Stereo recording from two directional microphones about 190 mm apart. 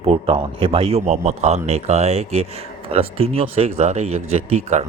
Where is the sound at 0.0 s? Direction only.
30° right (ahead or behind).